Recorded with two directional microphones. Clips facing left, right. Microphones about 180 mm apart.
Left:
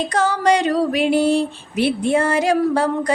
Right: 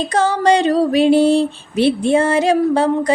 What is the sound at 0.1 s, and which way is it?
Female singing, 25° right (ahead or behind).